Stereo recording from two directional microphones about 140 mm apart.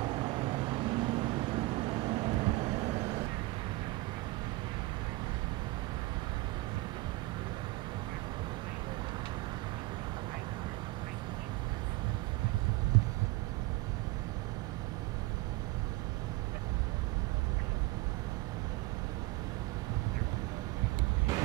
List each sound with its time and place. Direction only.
0.0 s vehicle: 35° right (ahead or behind)